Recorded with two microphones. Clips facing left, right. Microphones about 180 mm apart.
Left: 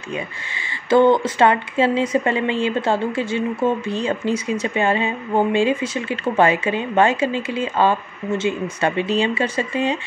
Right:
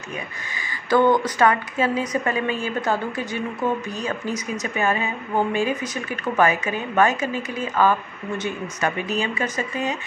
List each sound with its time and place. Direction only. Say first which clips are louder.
0.6 s speech: left 4 dB; 25° left (ahead or behind)